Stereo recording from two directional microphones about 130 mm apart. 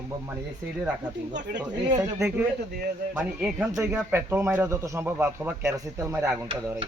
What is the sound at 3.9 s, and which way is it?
A man's voice, 15° right (ahead or behind).